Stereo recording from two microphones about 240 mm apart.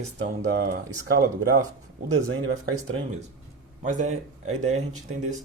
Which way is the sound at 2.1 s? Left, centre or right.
Right.